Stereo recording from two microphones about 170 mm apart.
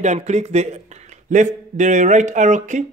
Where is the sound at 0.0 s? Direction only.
40° right (ahead or behind).